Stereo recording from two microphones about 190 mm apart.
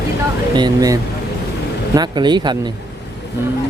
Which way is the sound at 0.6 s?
20° right (ahead or behind).